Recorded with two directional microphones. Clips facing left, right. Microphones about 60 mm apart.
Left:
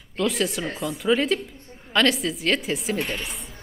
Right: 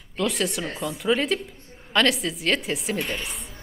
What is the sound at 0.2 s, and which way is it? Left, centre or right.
Speech, centre.